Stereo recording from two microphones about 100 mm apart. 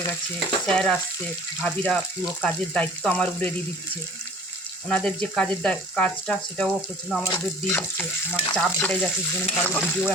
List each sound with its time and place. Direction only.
0.3 s stir: 5° left (ahead or behind)
1.6 s frying: 10° left (ahead or behind)
4.9 s frying: 5° left (ahead or behind)
7.1 s stir: 5° left (ahead or behind)
7.7 s frying: 15° left (ahead or behind)